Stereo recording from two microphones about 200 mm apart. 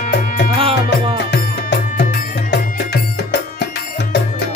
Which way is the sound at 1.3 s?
55° left (ahead or behind).